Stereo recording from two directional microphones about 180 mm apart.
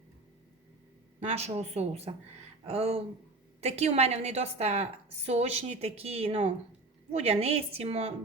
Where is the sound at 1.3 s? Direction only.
35° right (ahead or behind).